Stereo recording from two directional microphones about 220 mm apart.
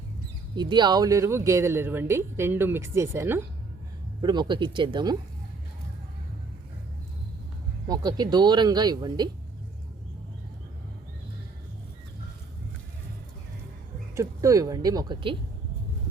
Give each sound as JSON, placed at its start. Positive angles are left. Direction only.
{"t": 0.5, "sound": "speech", "side_deg": -20}
{"t": 7.9, "sound": "speech", "side_deg": -15}
{"t": 14.2, "sound": "speech", "side_deg": -15}